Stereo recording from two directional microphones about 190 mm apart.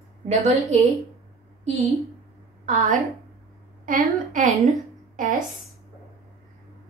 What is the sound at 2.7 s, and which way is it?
A woman's voice, 40° right (ahead or behind).